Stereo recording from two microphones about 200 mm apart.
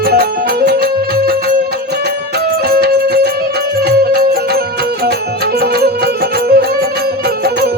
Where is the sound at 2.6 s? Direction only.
50° right (ahead or behind).